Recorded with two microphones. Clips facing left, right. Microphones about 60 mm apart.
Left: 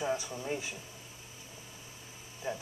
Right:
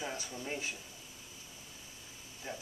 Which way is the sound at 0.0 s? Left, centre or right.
Left.